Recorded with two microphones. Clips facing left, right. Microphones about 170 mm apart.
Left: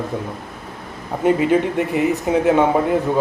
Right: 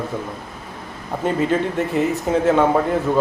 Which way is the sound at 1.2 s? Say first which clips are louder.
Left 4 dB; 15° left (ahead or behind).